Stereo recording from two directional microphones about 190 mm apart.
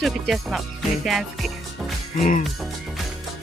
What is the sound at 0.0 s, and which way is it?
Music, centre (ahead or behind).